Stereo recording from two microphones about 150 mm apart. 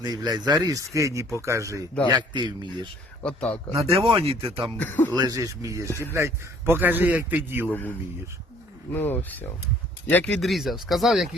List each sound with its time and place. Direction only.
0.0 s speech: 25° right (ahead or behind)
4.8 s speech: 15° left (ahead or behind)
5.1 s speech: 25° right (ahead or behind)
5.9 s speech: 15° left (ahead or behind)
6.1 s a man's voice: 15° right (ahead or behind)
7.7 s speech: 10° left (ahead or behind)